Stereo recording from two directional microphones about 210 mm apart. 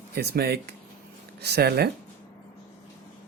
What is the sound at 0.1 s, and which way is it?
Speech, 50° right (ahead or behind).